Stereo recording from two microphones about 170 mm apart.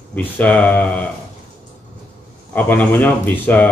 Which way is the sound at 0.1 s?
10° left (ahead or behind).